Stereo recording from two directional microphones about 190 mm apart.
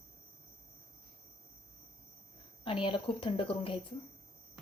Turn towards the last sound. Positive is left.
turn(degrees=30)  # may be behind; listen again after turning